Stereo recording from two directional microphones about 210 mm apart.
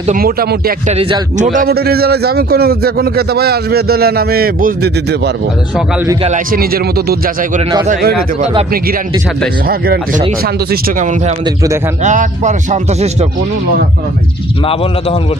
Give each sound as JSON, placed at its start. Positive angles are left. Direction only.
{"t": 0.0, "sound": "a man's voice", "side_deg": -40}
{"t": 0.9, "sound": "a man's voice", "side_deg": -30}
{"t": 7.9, "sound": "speech", "side_deg": -35}
{"t": 9.7, "sound": "a man's voice", "side_deg": -45}
{"t": 12.0, "sound": "speech", "side_deg": -35}